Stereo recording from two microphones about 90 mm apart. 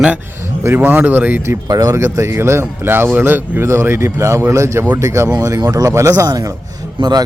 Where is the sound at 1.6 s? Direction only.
40° right (ahead or behind).